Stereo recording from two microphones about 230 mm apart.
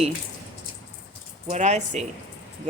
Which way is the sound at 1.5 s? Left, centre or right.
Right.